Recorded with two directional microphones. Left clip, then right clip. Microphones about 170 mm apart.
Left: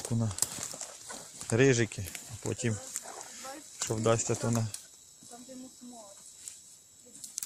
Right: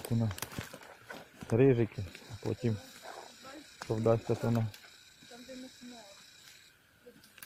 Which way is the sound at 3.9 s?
15° left (ahead or behind).